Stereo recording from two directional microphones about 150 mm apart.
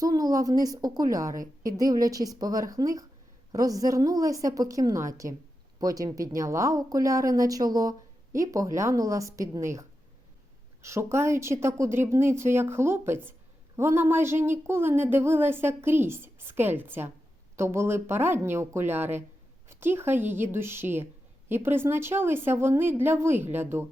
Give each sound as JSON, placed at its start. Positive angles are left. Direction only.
{"t": 0.0, "sound": "speech", "side_deg": -25}
{"t": 10.8, "sound": "a woman's voice", "side_deg": -20}